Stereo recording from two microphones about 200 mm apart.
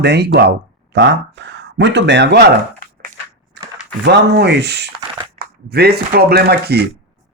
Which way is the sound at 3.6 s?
60° right (ahead or behind).